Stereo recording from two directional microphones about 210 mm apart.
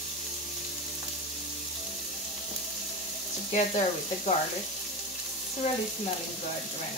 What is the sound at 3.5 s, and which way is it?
Speech, 30° left (ahead or behind).